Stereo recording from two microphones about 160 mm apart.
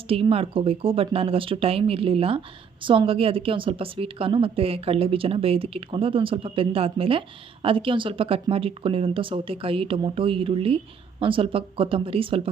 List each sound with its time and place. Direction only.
0.1 s a woman's voice: 35° right (ahead or behind)